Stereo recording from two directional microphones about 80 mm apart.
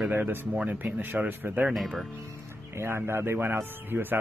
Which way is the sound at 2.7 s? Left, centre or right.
Right.